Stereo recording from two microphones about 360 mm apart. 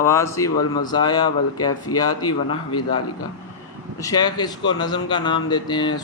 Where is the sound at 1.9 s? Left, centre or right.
Left.